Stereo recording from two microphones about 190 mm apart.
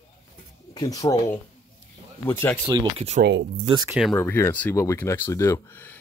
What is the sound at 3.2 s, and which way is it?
Speech, 75° right (ahead or behind).